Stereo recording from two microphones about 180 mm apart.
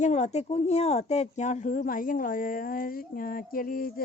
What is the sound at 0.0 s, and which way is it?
Speech, 40° left (ahead or behind).